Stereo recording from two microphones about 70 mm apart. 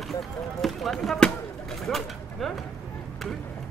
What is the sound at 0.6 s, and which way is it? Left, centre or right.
Speech, centre.